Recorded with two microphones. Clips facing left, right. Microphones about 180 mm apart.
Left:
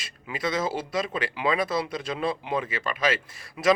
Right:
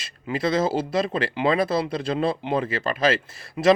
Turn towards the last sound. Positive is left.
turn(degrees=-30)  # may be behind; listen again after turning